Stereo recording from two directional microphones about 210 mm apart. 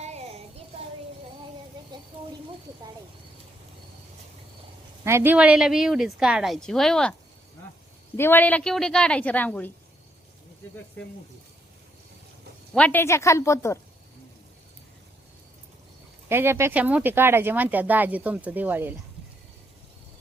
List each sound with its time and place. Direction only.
0.0 s child singing: 30° right (ahead or behind)
5.0 s a woman's voice: 10° right (ahead or behind); by 9.7 s 10° left (ahead or behind)
12.7 s speech: 5° left (ahead or behind)
16.3 s speech: 10° right (ahead or behind)